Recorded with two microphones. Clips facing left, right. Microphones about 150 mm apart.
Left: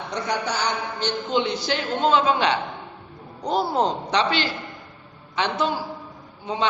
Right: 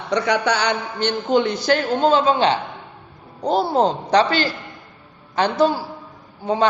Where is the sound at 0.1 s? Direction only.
75° right (ahead or behind).